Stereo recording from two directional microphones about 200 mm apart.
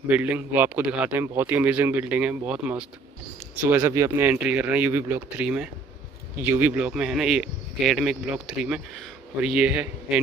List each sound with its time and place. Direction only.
0.1 s speech: 10° right (ahead or behind)